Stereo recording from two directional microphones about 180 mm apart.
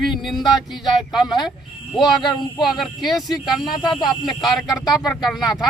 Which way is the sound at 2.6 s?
Centre (ahead or behind).